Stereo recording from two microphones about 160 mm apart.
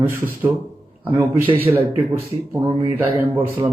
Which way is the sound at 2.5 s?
25° right (ahead or behind).